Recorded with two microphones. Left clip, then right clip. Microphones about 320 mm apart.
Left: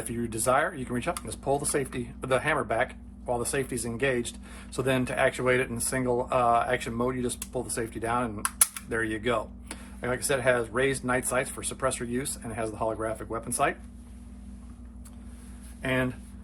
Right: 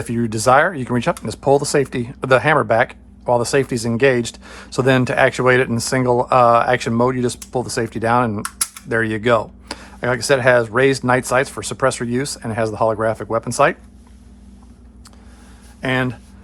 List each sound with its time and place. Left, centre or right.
0.1 s speech: centre
15.8 s speech: centre